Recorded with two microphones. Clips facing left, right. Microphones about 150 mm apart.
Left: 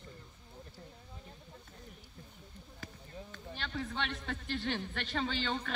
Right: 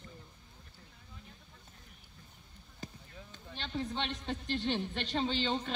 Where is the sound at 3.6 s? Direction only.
25° right (ahead or behind).